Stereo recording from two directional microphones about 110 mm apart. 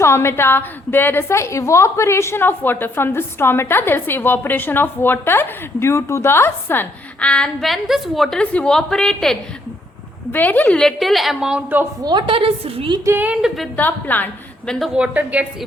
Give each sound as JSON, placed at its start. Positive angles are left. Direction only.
{"t": 0.0, "sound": "a woman's voice", "side_deg": 25}
{"t": 10.3, "sound": "a woman's voice", "side_deg": 15}
{"t": 10.8, "sound": "a woman's voice", "side_deg": 0}
{"t": 12.0, "sound": "a woman's voice", "side_deg": -45}
{"t": 13.1, "sound": "a woman's voice", "side_deg": -15}
{"t": 13.7, "sound": "a woman's voice", "side_deg": 15}
{"t": 14.9, "sound": "a woman's voice", "side_deg": -10}